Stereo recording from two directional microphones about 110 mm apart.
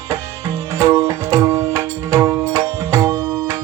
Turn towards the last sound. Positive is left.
turn(degrees=-30)  # may be behind; listen again after turning